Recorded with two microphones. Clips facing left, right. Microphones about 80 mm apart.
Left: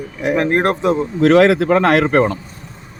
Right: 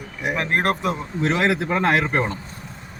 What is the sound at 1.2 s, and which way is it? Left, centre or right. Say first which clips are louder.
Speech: left 10 dB; left.